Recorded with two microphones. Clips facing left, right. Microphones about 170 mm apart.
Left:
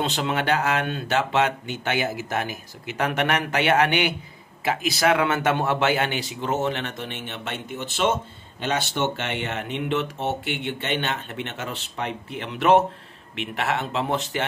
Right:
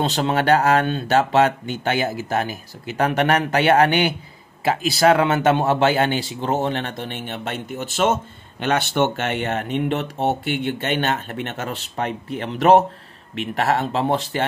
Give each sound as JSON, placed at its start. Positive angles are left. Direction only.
{"t": 0.0, "sound": "speech", "side_deg": -40}